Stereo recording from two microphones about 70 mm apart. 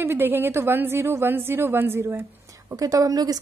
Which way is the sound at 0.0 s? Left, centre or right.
Right.